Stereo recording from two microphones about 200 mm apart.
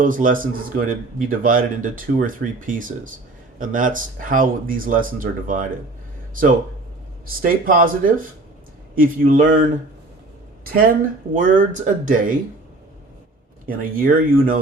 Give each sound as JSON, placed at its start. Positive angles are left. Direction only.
{"t": 0.0, "sound": "speech", "side_deg": -40}
{"t": 7.4, "sound": "speech", "side_deg": -45}
{"t": 13.7, "sound": "speech", "side_deg": -45}